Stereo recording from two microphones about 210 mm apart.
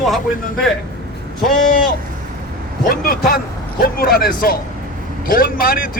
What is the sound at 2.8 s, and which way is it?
Speech, 45° left (ahead or behind).